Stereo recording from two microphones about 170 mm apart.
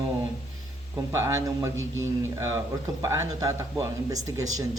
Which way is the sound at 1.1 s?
15° right (ahead or behind).